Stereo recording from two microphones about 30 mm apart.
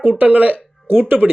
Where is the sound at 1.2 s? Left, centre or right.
Centre.